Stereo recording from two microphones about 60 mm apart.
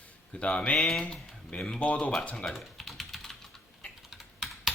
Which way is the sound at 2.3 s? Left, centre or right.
Centre.